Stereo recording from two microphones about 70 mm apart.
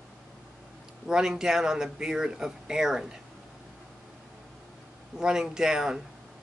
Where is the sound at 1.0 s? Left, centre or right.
Centre.